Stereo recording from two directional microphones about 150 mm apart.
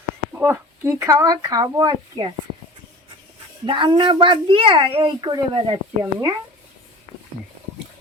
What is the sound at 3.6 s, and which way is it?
A child's voice, 35° right (ahead or behind).